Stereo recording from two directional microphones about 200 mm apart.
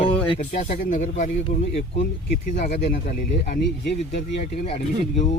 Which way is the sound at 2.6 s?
45° left (ahead or behind).